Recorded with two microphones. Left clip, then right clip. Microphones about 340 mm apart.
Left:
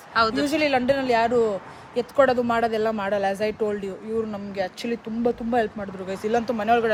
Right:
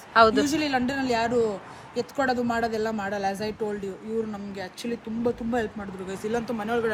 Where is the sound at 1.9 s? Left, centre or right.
Centre.